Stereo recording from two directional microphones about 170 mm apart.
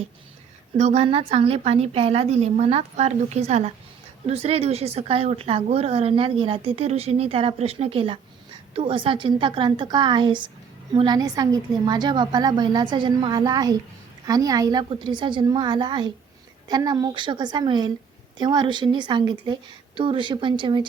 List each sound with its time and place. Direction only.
0.8 s a woman's voice: 40° right (ahead or behind)